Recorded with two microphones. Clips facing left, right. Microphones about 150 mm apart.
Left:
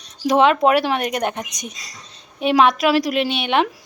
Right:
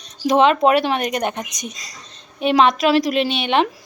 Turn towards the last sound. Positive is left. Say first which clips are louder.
# right 1 dB
turn(degrees=10)  # may be behind; listen again after turning